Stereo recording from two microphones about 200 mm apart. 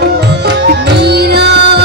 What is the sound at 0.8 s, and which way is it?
Music, 55° right (ahead or behind).